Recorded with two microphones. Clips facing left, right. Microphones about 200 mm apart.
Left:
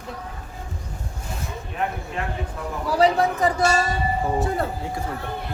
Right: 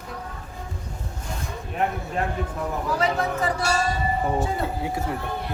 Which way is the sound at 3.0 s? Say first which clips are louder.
Left 8 dB; 35° left (ahead or behind).